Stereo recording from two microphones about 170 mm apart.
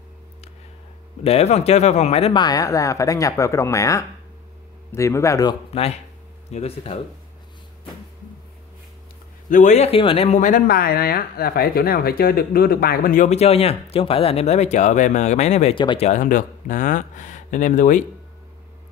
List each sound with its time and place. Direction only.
1.2 s speech: 40° left (ahead or behind)
2.4 s speech: 20° left (ahead or behind)
5.7 s speech: 35° left (ahead or behind)
9.5 s speech: 45° left (ahead or behind)
15.8 s speech: 30° left (ahead or behind)
16.1 s speech: 50° left (ahead or behind)